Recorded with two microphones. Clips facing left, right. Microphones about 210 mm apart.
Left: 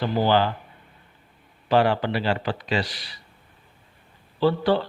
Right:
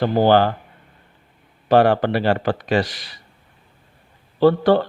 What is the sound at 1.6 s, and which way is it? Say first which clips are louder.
Speech: right 5 dB; 50° right (ahead or behind).